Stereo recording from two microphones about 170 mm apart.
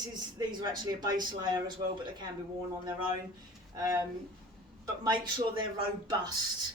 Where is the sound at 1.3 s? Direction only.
25° right (ahead or behind).